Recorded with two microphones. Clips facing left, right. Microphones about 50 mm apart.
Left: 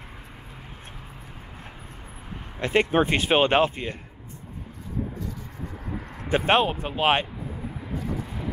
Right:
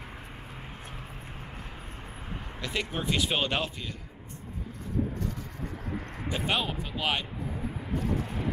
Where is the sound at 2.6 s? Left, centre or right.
Left.